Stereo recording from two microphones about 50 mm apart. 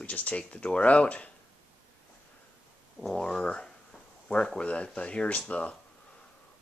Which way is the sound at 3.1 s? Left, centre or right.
Centre.